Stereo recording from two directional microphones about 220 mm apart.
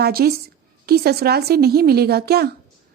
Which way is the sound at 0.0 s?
45° right (ahead or behind).